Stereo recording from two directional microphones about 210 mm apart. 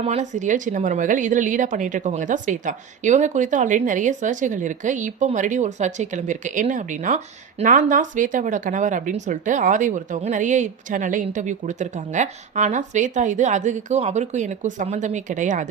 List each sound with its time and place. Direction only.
0.0 s speech: 30° right (ahead or behind)